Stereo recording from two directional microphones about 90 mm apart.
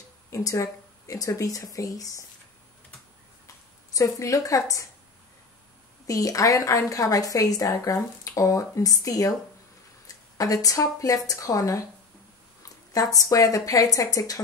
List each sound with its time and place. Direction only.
0.3 s a woman's voice: 35° left (ahead or behind)
3.9 s a woman's voice: 40° left (ahead or behind)
6.0 s a woman's voice: 40° left (ahead or behind)